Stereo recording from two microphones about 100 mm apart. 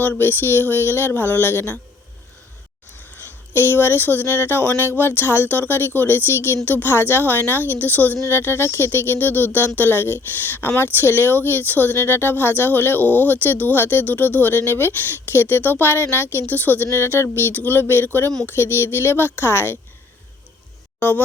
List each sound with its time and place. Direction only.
0.0 s speech: 20° left (ahead or behind)
2.9 s speech: 20° left (ahead or behind)
21.0 s speech: 20° left (ahead or behind)